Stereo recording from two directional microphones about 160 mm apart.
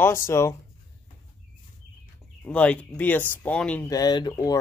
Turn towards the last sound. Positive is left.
turn(degrees=25)  # may be behind; listen again after turning